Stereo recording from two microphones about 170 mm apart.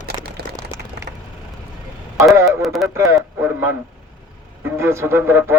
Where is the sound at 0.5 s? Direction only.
20° right (ahead or behind).